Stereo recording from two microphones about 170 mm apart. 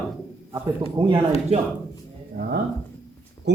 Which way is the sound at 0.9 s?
30° right (ahead or behind).